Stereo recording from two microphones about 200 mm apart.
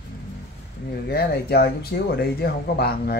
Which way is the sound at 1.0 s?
50° left (ahead or behind).